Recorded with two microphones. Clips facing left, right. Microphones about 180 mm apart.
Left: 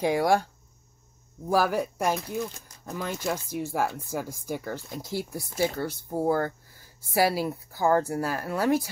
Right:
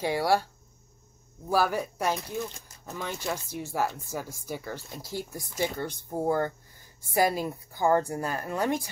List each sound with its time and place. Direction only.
0.0 s speech: 10° left (ahead or behind)
1.5 s speech: 10° left (ahead or behind)